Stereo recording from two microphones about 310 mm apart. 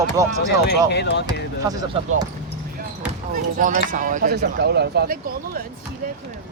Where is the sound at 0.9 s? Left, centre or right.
Left.